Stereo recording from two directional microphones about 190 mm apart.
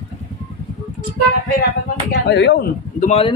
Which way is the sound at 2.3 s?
60° left (ahead or behind).